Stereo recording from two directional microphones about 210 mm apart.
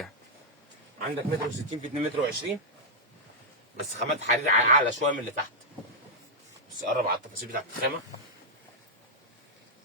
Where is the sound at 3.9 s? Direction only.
35° right (ahead or behind).